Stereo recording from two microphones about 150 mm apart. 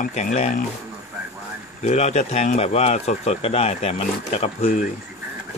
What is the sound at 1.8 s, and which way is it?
Speech, 50° left (ahead or behind).